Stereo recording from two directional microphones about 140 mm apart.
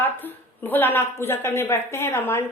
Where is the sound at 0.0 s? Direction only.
15° left (ahead or behind).